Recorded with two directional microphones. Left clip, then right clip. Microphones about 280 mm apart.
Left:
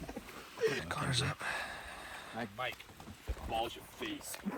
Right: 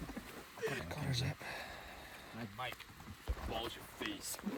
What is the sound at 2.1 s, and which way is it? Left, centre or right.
Vehicle, centre.